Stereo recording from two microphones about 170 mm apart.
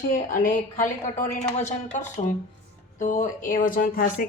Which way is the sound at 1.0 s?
40° left (ahead or behind).